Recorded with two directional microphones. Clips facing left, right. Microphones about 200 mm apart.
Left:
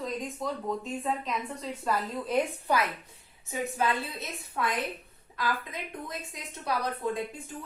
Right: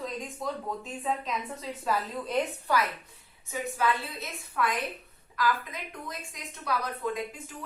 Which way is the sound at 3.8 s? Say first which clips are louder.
Right 1 dB; 25° left (ahead or behind).